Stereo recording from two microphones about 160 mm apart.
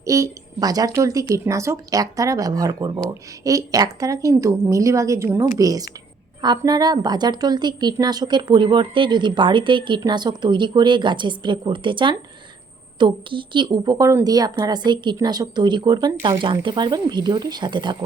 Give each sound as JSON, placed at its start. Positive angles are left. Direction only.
{"t": 0.0, "sound": "a woman's voice", "side_deg": -20}